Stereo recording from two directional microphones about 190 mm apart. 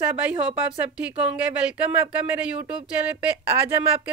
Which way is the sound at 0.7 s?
5° right (ahead or behind).